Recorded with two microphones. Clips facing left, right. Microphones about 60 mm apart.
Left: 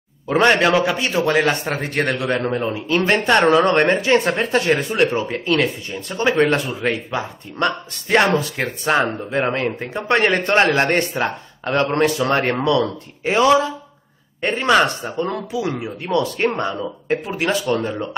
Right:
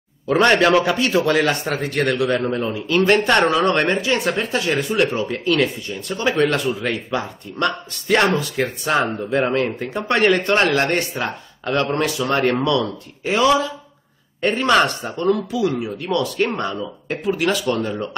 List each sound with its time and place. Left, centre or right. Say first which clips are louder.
0.4 s a man's voice: even; centre
0.9 s speech: right 1 dB; left